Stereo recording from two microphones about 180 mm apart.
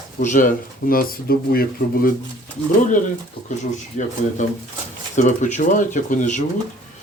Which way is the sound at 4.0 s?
45° left (ahead or behind).